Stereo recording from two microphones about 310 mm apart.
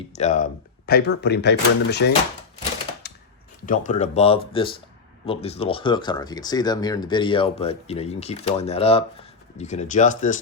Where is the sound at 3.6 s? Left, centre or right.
Left.